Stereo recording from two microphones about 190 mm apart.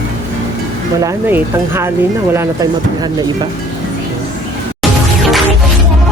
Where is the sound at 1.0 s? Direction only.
15° right (ahead or behind).